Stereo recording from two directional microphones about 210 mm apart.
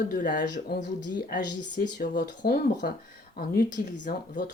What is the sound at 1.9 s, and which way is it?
Speech, 50° left (ahead or behind).